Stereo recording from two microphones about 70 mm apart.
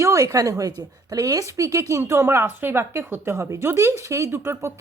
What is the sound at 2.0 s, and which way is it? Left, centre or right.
Speech, right.